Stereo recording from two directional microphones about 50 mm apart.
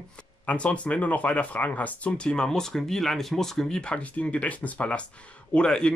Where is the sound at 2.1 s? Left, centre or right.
Centre.